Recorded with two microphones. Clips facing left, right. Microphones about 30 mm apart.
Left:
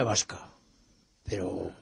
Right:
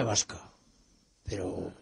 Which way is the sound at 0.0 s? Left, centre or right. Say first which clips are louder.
Left 2 dB; centre.